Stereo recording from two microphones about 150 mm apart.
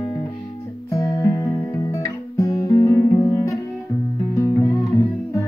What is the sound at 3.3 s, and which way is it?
Music, 20° left (ahead or behind).